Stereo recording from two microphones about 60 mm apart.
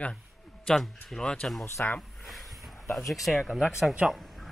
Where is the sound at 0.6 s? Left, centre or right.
Centre.